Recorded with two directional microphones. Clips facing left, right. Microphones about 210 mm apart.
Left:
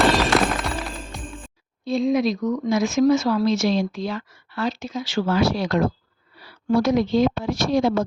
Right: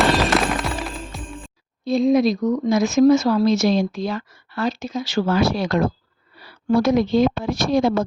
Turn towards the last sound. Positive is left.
turn(degrees=-55)  # may be behind; listen again after turning